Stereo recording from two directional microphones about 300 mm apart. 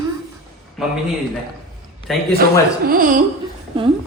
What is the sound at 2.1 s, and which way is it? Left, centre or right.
Speech, centre.